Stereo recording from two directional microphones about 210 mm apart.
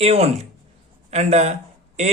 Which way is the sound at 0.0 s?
30° right (ahead or behind).